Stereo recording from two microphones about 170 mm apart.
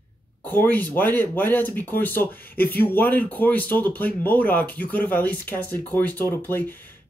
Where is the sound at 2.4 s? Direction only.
60° left (ahead or behind).